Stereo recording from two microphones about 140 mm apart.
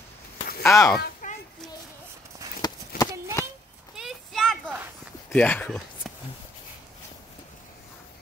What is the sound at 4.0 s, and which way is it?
Clip-clop, centre (ahead or behind).